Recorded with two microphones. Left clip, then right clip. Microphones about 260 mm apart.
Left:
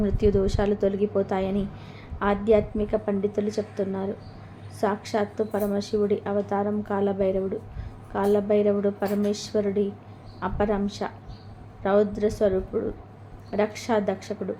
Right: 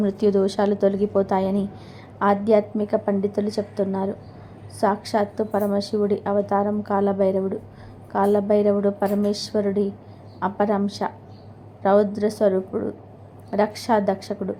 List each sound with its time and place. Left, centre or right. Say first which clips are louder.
0.0 s a woman's voice: right 3 dB; centre